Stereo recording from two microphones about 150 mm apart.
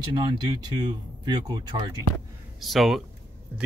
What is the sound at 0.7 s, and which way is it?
Speech, 25° right (ahead or behind).